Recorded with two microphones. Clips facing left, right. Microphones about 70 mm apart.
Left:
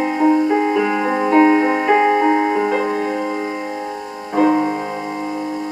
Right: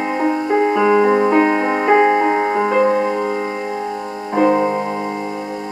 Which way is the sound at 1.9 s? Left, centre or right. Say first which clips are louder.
Right 1 dB; right.